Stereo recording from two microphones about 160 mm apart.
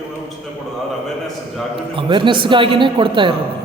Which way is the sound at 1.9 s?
30° right (ahead or behind).